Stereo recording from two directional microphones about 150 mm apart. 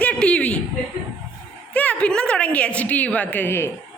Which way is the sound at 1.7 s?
10° left (ahead or behind).